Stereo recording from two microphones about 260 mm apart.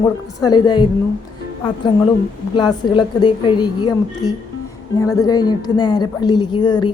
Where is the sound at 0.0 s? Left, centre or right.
Centre.